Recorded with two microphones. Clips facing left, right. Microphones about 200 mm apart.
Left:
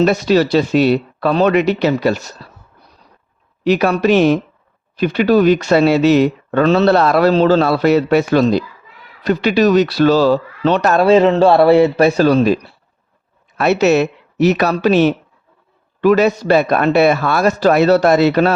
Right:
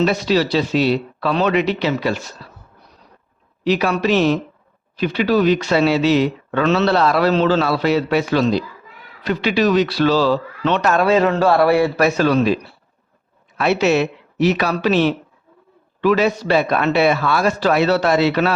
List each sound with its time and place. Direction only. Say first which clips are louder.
0.0 s a man's voice: left 4 dB; 50° left (ahead or behind)
3.6 s a man's voice: left 4 dB; 50° left (ahead or behind)
6.9 s a man's voice: left 4 dB; 50° left (ahead or behind)
13.6 s a man's voice: left 4 dB; 45° left (ahead or behind)